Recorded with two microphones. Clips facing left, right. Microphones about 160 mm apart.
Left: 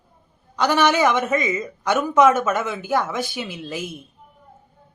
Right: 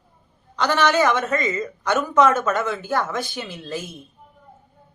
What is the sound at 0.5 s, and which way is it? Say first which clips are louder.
Speech: left 1 dB; 15° left (ahead or behind).